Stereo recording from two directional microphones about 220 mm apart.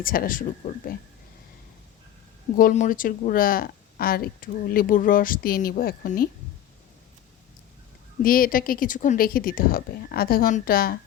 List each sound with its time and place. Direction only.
0.0 s speech: 40° left (ahead or behind)
2.6 s speech: 35° left (ahead or behind)
8.2 s speech: 40° left (ahead or behind)